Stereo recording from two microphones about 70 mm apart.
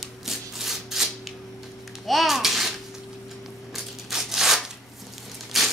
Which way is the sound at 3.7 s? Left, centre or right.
Centre.